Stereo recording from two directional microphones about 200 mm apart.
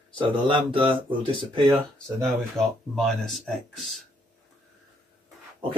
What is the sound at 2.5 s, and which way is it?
Speech, centre (ahead or behind).